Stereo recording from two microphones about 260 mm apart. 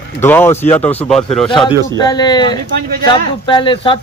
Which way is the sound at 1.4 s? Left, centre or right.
Centre.